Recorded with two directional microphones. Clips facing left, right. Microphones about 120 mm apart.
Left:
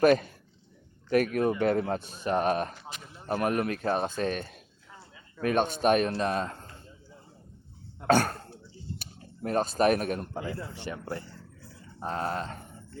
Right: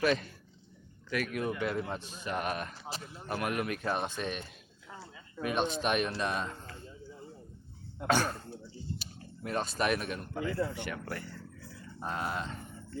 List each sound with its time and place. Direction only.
0.0 s speech: 50° left (ahead or behind)
8.0 s speech: 50° left (ahead or behind)
9.4 s speech: 45° left (ahead or behind)
10.3 s speech: 30° left (ahead or behind)